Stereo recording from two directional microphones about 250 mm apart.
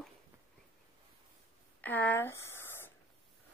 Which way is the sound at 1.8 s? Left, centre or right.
Centre.